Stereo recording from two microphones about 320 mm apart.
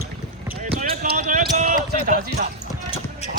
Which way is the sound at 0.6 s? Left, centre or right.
Right.